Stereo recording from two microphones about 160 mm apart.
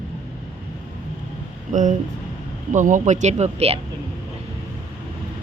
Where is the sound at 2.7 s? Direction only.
50° right (ahead or behind).